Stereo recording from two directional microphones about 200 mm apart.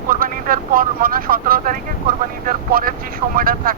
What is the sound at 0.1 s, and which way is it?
Speech, 45° right (ahead or behind).